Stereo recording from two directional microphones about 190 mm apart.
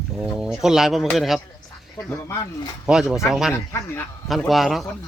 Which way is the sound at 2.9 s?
5° right (ahead or behind).